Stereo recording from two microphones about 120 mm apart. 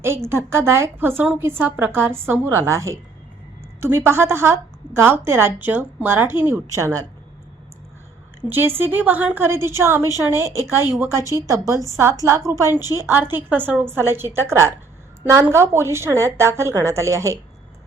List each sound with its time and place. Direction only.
0.0 s a woman's voice: 20° right (ahead or behind)
8.4 s a woman's voice: 20° right (ahead or behind)